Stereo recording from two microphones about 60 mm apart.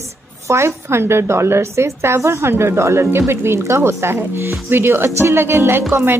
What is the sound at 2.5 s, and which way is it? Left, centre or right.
A woman's voice, right.